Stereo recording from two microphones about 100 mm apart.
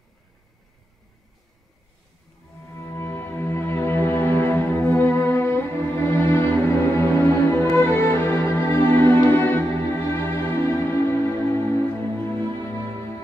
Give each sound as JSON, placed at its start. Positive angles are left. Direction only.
{"t": 2.7, "sound": "music", "side_deg": 25}